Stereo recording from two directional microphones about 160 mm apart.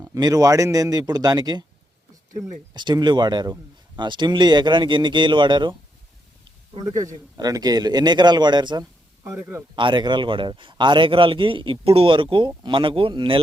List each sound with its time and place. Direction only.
0.0 s speech: 20° right (ahead or behind)
6.7 s speech: 20° right (ahead or behind)
9.7 s speech: 30° right (ahead or behind)